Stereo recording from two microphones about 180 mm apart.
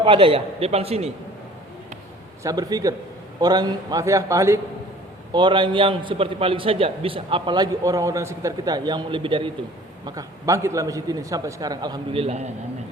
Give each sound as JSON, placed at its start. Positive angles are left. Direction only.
{"t": 0.0, "sound": "a man's voice", "side_deg": -30}
{"t": 2.4, "sound": "a man's voice", "side_deg": -20}